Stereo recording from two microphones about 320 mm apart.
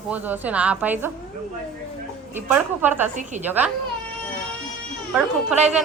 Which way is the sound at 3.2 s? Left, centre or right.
Right.